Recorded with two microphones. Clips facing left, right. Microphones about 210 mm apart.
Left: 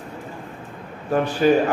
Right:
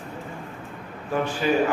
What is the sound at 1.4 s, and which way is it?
Speech, 45° left (ahead or behind).